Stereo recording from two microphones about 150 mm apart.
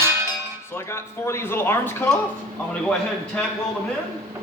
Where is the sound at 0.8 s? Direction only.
20° left (ahead or behind).